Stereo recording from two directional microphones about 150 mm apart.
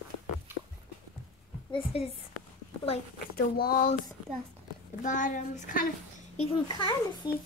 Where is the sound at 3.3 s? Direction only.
85° left.